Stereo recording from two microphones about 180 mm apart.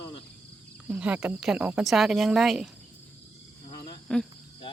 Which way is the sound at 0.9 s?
5° right (ahead or behind).